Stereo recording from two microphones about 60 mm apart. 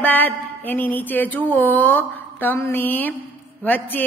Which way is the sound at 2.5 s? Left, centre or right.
Left.